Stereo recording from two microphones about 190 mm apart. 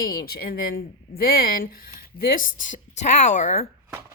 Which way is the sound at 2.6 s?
40° left (ahead or behind).